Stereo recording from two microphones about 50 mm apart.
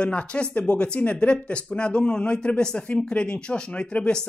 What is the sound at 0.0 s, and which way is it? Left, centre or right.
Speech, left.